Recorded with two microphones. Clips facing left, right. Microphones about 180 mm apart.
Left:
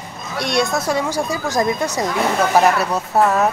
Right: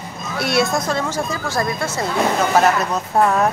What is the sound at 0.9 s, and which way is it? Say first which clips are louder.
Speech: left 2 dB; 10° left (ahead or behind).